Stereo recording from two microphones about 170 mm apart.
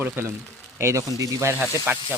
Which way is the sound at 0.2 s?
15° right (ahead or behind).